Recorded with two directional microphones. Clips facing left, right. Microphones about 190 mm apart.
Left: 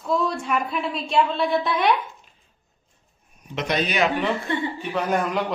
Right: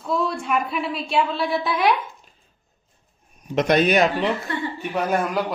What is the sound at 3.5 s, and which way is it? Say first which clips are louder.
Speech: right 7 dB; 50° right (ahead or behind).